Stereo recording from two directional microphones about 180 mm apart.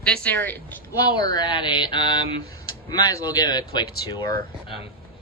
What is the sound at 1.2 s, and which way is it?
Speech, 25° left (ahead or behind).